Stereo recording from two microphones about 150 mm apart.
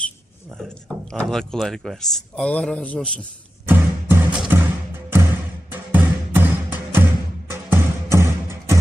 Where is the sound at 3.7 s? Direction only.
15° right (ahead or behind).